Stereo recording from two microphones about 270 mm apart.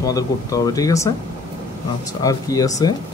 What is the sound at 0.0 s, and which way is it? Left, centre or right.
Speech, centre.